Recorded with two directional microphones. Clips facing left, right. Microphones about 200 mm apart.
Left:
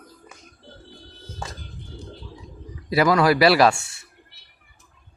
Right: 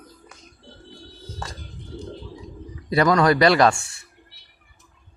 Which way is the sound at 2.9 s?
5° left (ahead or behind).